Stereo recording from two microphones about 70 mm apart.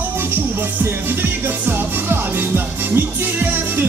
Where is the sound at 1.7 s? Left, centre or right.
Right.